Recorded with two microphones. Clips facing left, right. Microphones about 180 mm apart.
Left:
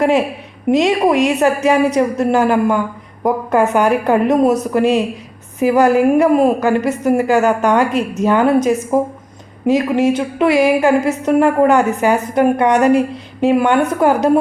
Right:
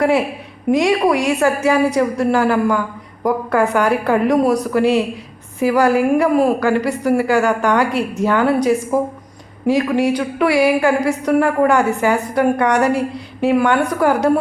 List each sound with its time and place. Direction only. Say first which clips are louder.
0.7 s a woman's voice: left 1 dB; 20° left (ahead or behind)